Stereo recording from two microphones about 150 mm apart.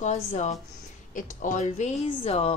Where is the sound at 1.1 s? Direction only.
60° left (ahead or behind); by 2.5 s 45° left (ahead or behind).